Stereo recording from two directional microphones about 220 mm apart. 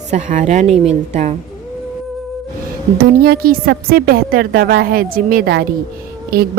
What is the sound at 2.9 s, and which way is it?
A woman's voice, 40° right (ahead or behind).